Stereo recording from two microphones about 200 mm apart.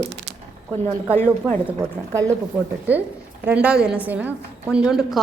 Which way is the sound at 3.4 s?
5° right (ahead or behind).